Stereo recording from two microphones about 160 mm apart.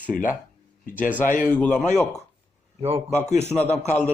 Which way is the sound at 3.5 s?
5° left (ahead or behind).